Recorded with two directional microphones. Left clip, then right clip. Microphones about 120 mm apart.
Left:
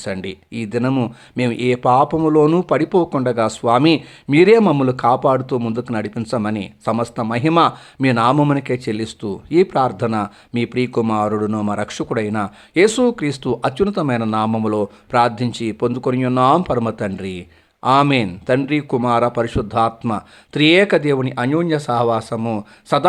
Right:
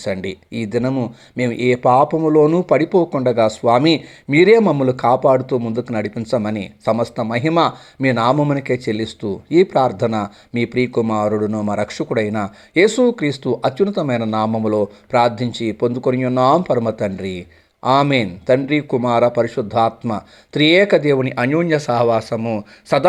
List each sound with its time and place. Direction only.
0.0 s speech: 10° left (ahead or behind)
0.9 s speech: 35° left (ahead or behind)
1.4 s speech: 15° left (ahead or behind)
4.6 s speech: 35° left (ahead or behind)
4.9 s a man's voice: 10° left (ahead or behind)